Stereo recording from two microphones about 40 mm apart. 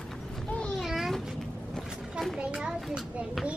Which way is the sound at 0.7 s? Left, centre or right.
Centre.